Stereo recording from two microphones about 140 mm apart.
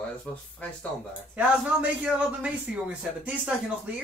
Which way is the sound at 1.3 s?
10° right (ahead or behind).